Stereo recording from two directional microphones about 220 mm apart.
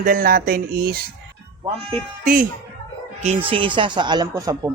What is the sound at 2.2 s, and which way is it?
Speech, 40° right (ahead or behind).